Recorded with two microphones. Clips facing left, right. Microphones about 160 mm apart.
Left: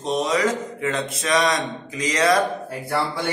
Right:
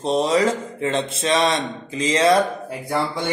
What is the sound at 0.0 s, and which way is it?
Speech, 30° right (ahead or behind).